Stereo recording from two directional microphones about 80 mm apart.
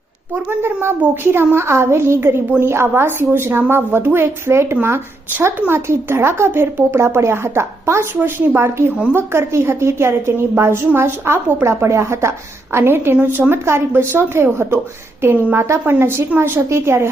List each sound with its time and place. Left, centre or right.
0.3 s speech: right